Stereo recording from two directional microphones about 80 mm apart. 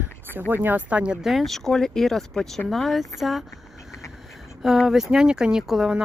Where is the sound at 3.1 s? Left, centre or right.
Centre.